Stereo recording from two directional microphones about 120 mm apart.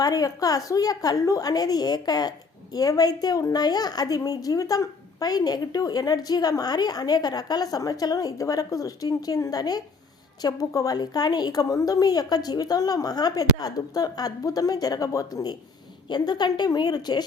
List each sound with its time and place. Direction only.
0.0 s a woman's voice: 30° left (ahead or behind)